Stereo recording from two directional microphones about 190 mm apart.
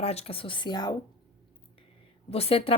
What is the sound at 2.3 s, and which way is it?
Speech, 30° left (ahead or behind).